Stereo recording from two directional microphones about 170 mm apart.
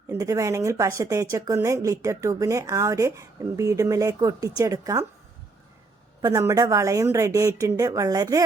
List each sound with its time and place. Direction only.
0.1 s a woman's voice: 20° right (ahead or behind)
6.2 s a woman's voice: 20° right (ahead or behind)